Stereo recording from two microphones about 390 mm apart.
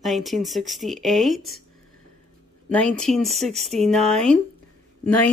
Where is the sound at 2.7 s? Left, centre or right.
Centre.